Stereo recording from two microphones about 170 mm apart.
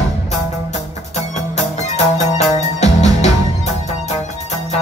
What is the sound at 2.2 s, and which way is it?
Music, 40° left (ahead or behind).